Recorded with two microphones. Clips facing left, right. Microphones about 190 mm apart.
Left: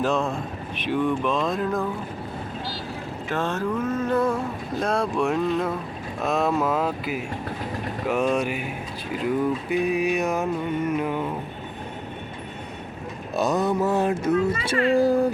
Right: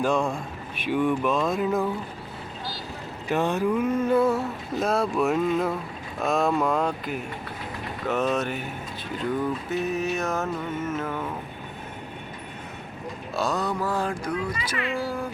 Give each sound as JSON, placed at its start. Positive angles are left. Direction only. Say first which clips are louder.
{"t": 0.0, "sound": "speech", "louder": "even", "side_deg": -10}
{"t": 0.9, "sound": "vehicle", "louder": "even", "side_deg": -10}
{"t": 3.2, "sound": "vehicle", "louder": "right 3 dB", "side_deg": -15}
{"t": 8.0, "sound": "mantra", "louder": "left 2 dB", "side_deg": 10}
{"t": 13.3, "sound": "a sound", "louder": "left 5 dB", "side_deg": 20}
{"t": 14.8, "sound": "speech", "louder": "left 11 dB", "side_deg": 40}